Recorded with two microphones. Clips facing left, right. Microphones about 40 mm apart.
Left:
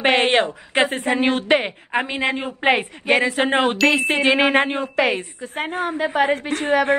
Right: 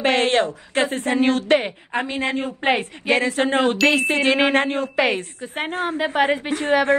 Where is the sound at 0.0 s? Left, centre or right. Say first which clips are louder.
Left 1 dB; left; by 3.4 s centre.